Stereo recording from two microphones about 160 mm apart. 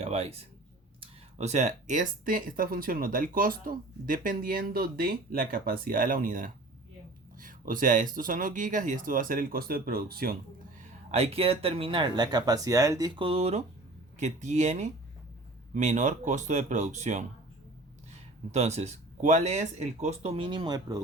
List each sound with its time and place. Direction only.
0.0 s a sound: 40° right (ahead or behind)
1.4 s speech: 45° right (ahead or behind); by 10.3 s 70° right (ahead or behind)
11.1 s speech: 40° right (ahead or behind)
18.5 s speech: 45° right (ahead or behind); by 21.0 s 25° right (ahead or behind)